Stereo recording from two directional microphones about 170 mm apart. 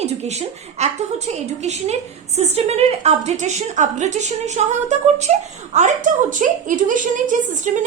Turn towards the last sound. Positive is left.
turn(degrees=-45)  # may be behind; listen again after turning